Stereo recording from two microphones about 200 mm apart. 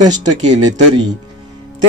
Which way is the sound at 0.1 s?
20° right (ahead or behind).